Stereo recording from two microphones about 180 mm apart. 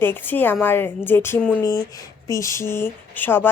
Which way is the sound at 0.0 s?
10° left (ahead or behind).